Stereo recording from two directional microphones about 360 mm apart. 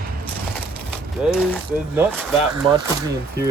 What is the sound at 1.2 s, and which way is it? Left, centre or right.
Speech, centre.